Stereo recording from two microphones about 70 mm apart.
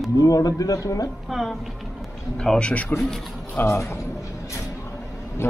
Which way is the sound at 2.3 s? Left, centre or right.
Centre.